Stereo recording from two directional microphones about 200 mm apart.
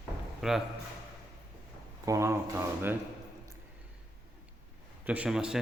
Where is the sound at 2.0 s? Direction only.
15° right (ahead or behind).